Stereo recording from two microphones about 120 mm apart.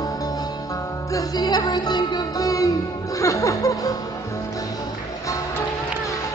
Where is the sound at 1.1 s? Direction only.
35° left (ahead or behind).